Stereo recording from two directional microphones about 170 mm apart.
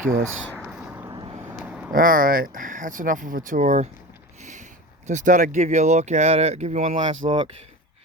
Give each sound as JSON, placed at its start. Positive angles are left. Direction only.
{"t": 0.6, "sound": "a sound", "side_deg": -5}
{"t": 1.1, "sound": "vehicle", "side_deg": -25}
{"t": 1.5, "sound": "a sound", "side_deg": -5}
{"t": 1.9, "sound": "speech", "side_deg": -55}
{"t": 5.0, "sound": "speech", "side_deg": -45}
{"t": 7.3, "sound": "speech", "side_deg": -30}